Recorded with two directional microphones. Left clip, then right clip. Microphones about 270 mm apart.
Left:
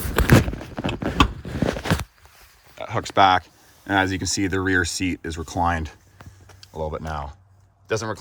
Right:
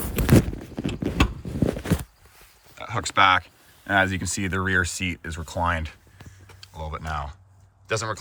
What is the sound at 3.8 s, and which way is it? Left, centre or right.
Speech, left.